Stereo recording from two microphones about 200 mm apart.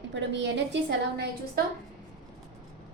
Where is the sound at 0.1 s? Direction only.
60° right (ahead or behind).